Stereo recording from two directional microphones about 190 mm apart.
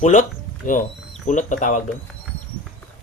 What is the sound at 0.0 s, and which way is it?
Speech, 40° left (ahead or behind).